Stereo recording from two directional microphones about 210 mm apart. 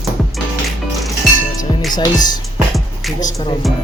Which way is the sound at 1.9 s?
20° left (ahead or behind).